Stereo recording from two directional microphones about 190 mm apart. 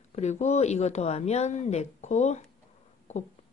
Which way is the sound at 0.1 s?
35° left (ahead or behind).